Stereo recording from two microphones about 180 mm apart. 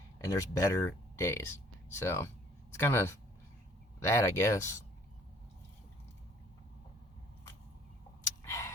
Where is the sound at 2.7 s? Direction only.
15° left (ahead or behind).